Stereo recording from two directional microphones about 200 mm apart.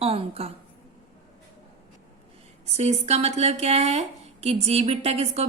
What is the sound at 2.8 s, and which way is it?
A woman's voice, 35° right (ahead or behind).